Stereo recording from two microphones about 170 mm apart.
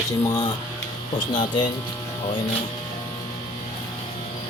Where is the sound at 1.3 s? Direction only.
25° left (ahead or behind).